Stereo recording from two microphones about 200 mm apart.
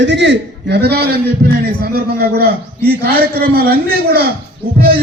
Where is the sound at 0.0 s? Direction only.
60° right (ahead or behind).